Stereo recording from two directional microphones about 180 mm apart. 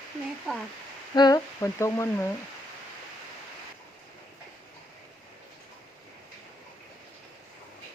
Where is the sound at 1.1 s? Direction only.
20° left (ahead or behind).